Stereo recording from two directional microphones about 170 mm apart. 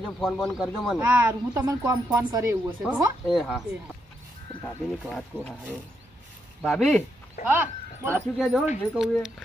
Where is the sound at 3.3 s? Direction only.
Centre (ahead or behind).